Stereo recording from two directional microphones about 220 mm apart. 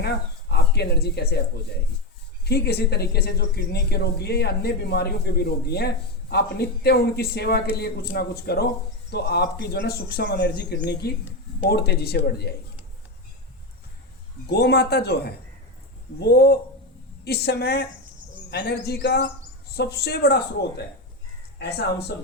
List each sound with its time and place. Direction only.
0.0 s speech: 50° left (ahead or behind)
2.4 s speech: 45° left (ahead or behind)
14.5 s speech: 45° left (ahead or behind)